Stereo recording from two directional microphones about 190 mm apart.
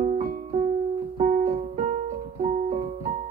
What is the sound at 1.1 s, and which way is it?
Music, 35° right (ahead or behind).